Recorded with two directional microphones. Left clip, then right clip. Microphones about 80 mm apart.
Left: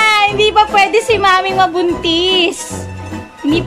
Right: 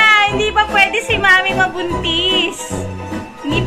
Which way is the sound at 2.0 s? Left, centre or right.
Left.